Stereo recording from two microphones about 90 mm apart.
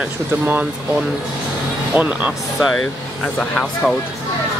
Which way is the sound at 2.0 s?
15° right (ahead or behind).